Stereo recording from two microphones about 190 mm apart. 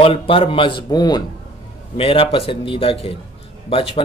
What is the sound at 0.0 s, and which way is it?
Speech, 30° left (ahead or behind).